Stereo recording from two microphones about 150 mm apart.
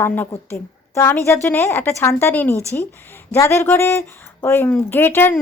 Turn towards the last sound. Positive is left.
turn(degrees=15)  # may be behind; listen again after turning